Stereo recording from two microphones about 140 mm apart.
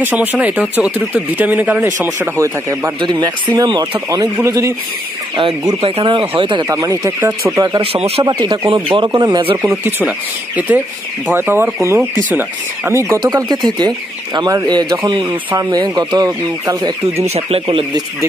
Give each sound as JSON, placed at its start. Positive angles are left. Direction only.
{"t": 0.0, "sound": "speech", "side_deg": -10}
{"t": 5.3, "sound": "speech", "side_deg": -40}
{"t": 6.7, "sound": "speech", "side_deg": -25}
{"t": 7.5, "sound": "speech", "side_deg": -25}
{"t": 7.8, "sound": "speech", "side_deg": -40}
{"t": 8.2, "sound": "speech", "side_deg": -30}
{"t": 9.7, "sound": "speech", "side_deg": -15}
{"t": 13.2, "sound": "speech", "side_deg": -30}
{"t": 17.2, "sound": "speech", "side_deg": -45}